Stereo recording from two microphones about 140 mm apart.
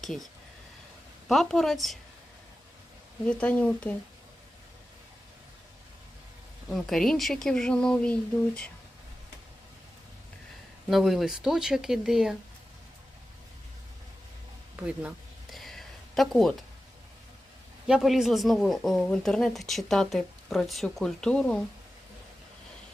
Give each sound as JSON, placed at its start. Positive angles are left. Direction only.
{"t": 0.0, "sound": "speech", "side_deg": 0}
{"t": 1.3, "sound": "speech", "side_deg": 0}
{"t": 3.2, "sound": "speech", "side_deg": 10}
{"t": 6.7, "sound": "speech", "side_deg": 0}
{"t": 10.8, "sound": "speech", "side_deg": 0}
{"t": 14.8, "sound": "a sound", "side_deg": -5}
{"t": 17.8, "sound": "speech", "side_deg": -5}